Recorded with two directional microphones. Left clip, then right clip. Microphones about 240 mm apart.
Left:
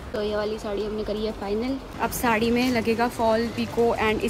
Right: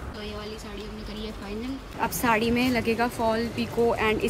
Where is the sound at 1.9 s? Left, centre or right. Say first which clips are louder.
Even; centre.